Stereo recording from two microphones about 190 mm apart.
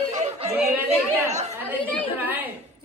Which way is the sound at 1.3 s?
35° right (ahead or behind).